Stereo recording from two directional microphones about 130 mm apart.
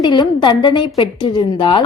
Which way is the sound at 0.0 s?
35° left (ahead or behind).